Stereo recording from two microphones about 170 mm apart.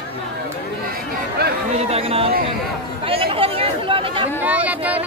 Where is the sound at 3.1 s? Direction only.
35° right (ahead or behind).